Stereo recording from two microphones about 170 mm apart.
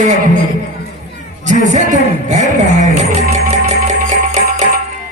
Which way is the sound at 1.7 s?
45° right (ahead or behind).